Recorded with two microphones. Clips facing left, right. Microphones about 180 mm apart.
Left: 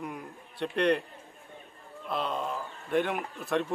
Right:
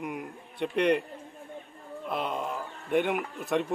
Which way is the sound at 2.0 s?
20° right (ahead or behind).